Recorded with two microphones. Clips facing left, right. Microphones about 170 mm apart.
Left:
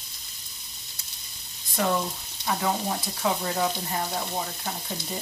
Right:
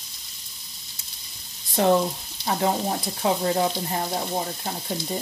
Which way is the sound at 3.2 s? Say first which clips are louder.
Right 4 dB; 25° right (ahead or behind).